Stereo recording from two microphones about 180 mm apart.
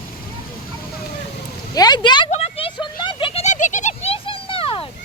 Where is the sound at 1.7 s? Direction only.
20° left (ahead or behind).